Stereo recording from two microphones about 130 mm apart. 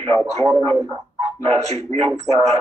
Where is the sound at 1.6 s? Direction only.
55° right (ahead or behind).